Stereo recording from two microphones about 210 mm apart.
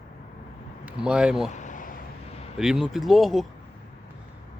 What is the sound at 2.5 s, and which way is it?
Speech, centre (ahead or behind).